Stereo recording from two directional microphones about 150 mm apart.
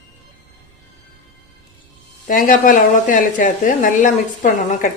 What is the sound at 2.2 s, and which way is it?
A woman's voice, 60° left (ahead or behind).